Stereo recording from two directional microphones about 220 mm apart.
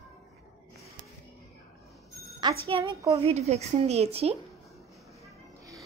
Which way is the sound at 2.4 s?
20° right (ahead or behind).